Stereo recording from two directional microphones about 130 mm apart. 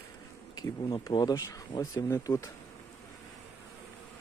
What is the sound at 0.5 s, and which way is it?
Speech, 35° left (ahead or behind).